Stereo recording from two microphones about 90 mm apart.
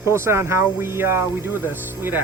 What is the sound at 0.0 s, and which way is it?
Speech, 30° right (ahead or behind).